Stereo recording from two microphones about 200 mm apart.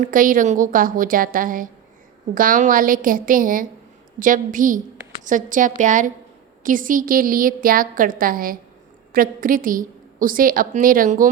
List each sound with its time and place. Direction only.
0.0 s a woman's voice: 45° right (ahead or behind)